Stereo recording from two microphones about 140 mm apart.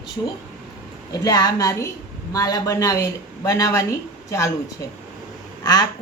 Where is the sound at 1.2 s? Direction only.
25° left (ahead or behind).